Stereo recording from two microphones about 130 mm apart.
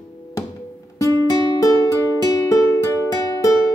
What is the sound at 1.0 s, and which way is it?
Music, 20° left (ahead or behind).